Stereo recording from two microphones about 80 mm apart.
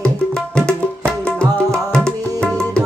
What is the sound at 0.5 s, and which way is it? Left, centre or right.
Music, centre.